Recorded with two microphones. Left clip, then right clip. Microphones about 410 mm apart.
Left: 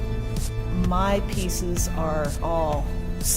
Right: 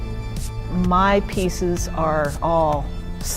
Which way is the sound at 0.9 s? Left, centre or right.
Right.